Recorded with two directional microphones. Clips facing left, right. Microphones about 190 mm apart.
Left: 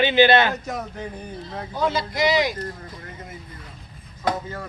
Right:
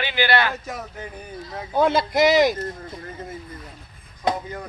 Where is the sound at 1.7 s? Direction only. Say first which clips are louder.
Right 5 dB; 55° right (ahead or behind).